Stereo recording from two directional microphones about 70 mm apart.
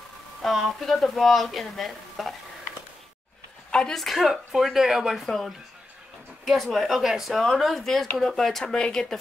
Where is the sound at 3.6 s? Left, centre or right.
Centre.